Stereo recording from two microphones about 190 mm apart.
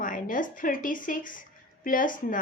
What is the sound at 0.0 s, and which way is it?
A woman's voice, 45° left (ahead or behind).